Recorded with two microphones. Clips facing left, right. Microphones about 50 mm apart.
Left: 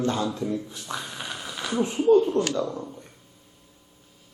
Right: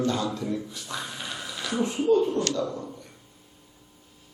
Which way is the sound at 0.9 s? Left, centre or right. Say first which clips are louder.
Left 1 dB; left.